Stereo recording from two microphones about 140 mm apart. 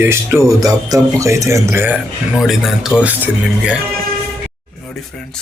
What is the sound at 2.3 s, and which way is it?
Speech, centre (ahead or behind).